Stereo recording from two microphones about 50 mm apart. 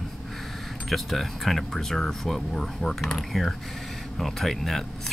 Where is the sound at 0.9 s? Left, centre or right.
Centre.